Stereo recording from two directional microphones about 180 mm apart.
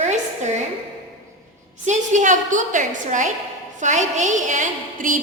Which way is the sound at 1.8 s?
40° right (ahead or behind).